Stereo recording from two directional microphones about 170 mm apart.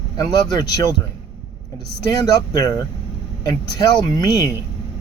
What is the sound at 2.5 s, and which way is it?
Speech, 20° left (ahead or behind).